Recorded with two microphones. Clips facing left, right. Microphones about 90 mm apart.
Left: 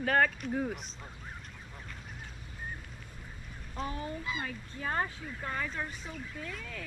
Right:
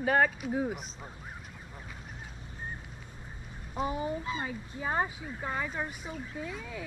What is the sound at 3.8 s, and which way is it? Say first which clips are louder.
Speech: right 5 dB; 15° right (ahead or behind).